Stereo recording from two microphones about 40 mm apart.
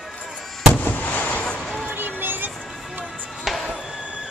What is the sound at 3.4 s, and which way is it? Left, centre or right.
Music, centre.